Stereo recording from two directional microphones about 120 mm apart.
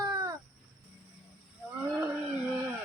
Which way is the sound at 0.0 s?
35° right (ahead or behind).